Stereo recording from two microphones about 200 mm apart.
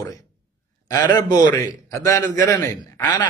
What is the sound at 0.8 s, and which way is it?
Speech, 20° left (ahead or behind).